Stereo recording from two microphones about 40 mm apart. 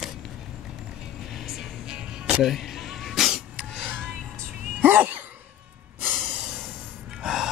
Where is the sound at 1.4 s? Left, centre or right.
Centre.